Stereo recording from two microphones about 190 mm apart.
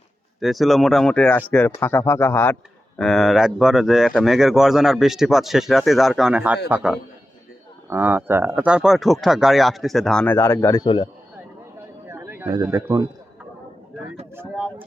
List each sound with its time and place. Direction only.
0.3 s speech: centre (ahead or behind); by 11.1 s 25° left (ahead or behind)
12.0 s a sound: 10° right (ahead or behind)
12.6 s speech: 15° right (ahead or behind)
14.3 s speech: 5° right (ahead or behind)